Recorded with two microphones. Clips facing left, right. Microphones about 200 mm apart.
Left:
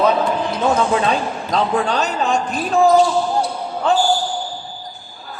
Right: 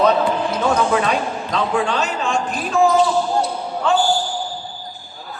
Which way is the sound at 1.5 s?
40° left (ahead or behind).